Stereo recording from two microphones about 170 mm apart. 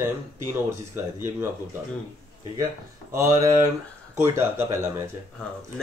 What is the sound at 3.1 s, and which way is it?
Speech, 20° right (ahead or behind).